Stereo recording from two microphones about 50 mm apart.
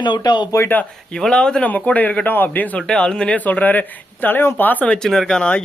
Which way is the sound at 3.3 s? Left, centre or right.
Left.